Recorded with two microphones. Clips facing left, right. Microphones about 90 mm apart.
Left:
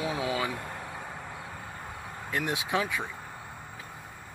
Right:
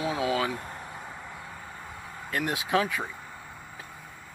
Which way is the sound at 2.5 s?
20° left (ahead or behind).